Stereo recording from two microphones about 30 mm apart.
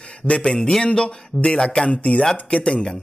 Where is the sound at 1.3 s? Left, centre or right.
Centre.